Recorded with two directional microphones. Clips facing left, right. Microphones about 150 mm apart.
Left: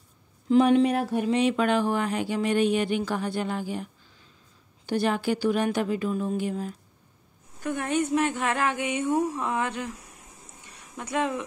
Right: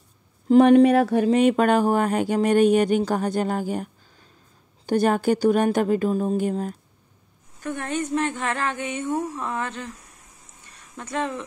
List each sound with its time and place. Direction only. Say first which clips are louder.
0.5 s speech: right 6 dB; 55° right (ahead or behind)
0.9 s speech: right 7 dB; 90° right
1.3 s speech: right 4 dB; 50° right (ahead or behind)
7.6 s a woman's voice: left 1 dB; 10° left (ahead or behind)
10.6 s a sound: even; 15° left (ahead or behind)